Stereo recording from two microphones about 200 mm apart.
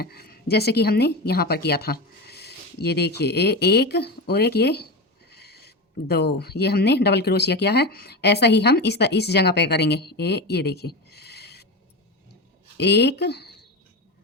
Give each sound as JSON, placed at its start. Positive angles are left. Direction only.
{"t": 0.0, "sound": "a woman's voice", "side_deg": 50}
{"t": 5.3, "sound": "a sound", "side_deg": 55}
{"t": 6.1, "sound": "speech", "side_deg": 50}
{"t": 12.7, "sound": "speech", "side_deg": 55}